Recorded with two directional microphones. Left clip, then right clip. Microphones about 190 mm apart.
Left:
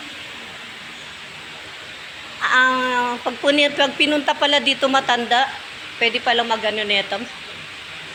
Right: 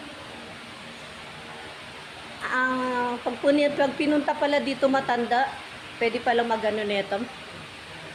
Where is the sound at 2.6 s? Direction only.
10° left (ahead or behind).